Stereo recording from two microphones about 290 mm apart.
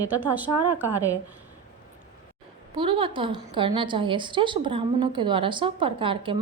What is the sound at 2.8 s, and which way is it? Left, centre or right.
A woman's voice, centre.